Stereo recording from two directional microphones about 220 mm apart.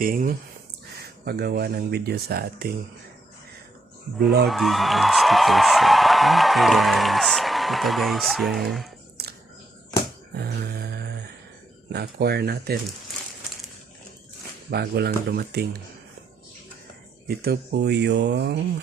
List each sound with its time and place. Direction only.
0.0 s speech: 40° right (ahead or behind)
4.4 s speech: centre (ahead or behind)
10.3 s a sound: 45° right (ahead or behind)
11.9 s speech: 45° right (ahead or behind)
14.7 s speech: 45° right (ahead or behind)
17.2 s speech: 45° right (ahead or behind)